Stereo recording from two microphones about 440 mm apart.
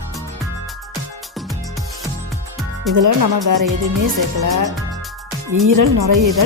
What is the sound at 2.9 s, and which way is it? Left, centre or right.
Speech, right.